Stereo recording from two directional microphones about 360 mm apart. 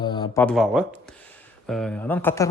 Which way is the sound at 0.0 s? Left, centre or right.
Centre.